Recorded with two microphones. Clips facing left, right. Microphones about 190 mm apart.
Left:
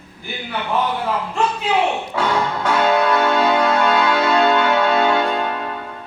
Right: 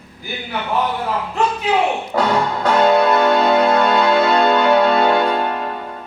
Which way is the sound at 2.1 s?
35° right (ahead or behind).